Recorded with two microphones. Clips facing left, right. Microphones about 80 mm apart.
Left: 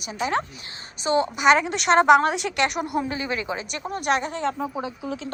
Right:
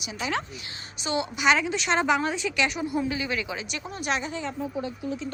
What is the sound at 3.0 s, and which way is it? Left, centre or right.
A woman's voice, left.